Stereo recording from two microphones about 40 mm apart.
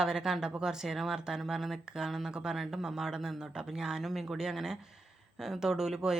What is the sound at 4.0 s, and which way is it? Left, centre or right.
Speech, centre.